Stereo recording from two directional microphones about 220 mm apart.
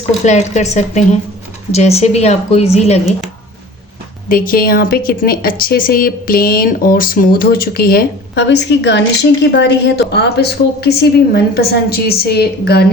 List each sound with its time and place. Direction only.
0.3 s a woman's voice: 30° left (ahead or behind)
4.3 s a woman's voice: 40° left (ahead or behind)